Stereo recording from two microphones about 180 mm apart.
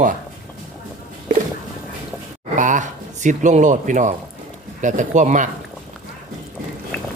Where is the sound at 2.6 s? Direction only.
45° right (ahead or behind).